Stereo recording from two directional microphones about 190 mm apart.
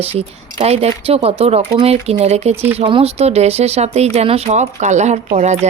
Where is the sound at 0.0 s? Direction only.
30° right (ahead or behind).